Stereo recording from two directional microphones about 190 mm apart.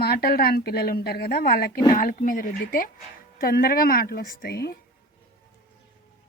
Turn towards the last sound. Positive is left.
turn(degrees=55)  # may be behind; listen again after turning